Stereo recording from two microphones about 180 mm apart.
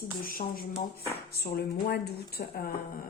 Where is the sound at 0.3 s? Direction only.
55° left (ahead or behind).